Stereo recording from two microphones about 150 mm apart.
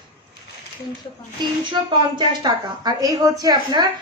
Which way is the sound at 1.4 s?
30° right (ahead or behind).